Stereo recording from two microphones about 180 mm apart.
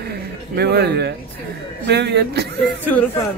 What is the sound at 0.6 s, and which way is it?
A man's voice, 65° right (ahead or behind).